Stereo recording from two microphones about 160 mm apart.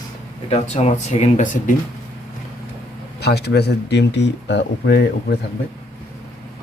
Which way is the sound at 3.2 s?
90° left.